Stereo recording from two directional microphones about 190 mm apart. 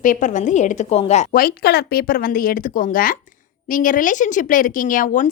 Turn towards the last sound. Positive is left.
turn(degrees=45)  # may be behind; listen again after turning